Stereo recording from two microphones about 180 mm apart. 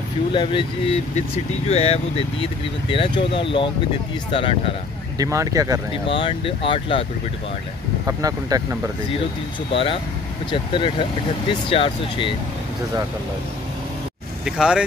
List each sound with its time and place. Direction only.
0.3 s speech: 25° left (ahead or behind)
5.2 s speech: 20° right (ahead or behind)
6.0 s speech: 30° left (ahead or behind)
8.1 s speech: 20° right (ahead or behind)
9.7 s speech: 30° left (ahead or behind)
14.4 s speech: 5° right (ahead or behind)